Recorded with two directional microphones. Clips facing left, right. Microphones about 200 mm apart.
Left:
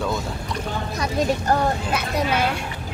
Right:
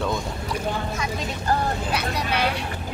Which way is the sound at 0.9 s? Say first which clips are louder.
Left 7 dB; 40° left (ahead or behind).